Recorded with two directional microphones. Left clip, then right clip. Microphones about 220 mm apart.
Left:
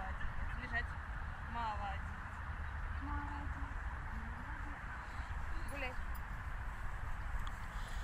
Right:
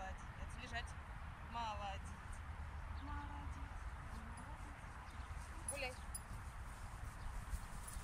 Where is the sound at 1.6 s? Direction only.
30° right (ahead or behind).